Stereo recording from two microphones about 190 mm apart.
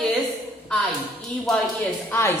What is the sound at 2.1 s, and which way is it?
Speech, 10° left (ahead or behind).